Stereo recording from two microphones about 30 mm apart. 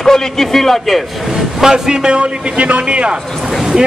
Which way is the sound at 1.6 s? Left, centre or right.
Right.